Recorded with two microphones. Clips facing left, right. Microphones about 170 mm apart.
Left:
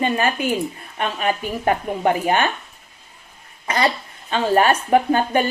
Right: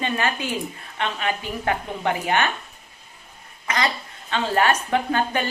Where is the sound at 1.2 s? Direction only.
35° left (ahead or behind).